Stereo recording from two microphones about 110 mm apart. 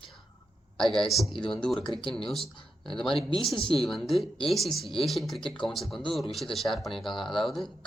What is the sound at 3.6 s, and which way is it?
Speech, 55° left (ahead or behind).